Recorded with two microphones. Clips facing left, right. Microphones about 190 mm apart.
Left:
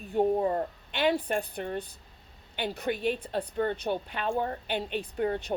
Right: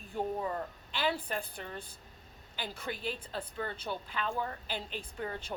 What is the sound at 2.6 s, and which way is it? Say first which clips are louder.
A woman's voice: left 9 dB; 65° left (ahead or behind).